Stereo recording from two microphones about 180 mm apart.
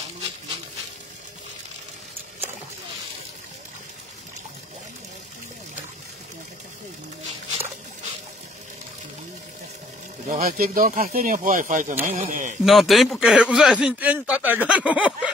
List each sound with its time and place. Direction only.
10.2 s speech: 45° right (ahead or behind)
12.6 s a man's voice: centre (ahead or behind)